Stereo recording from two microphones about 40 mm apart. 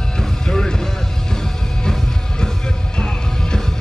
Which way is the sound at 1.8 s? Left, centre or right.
Centre.